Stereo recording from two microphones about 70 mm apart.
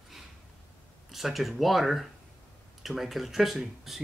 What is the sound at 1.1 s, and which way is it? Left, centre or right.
Speech, centre.